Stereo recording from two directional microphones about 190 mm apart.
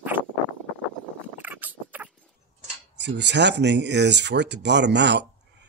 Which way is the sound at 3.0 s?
65° right (ahead or behind).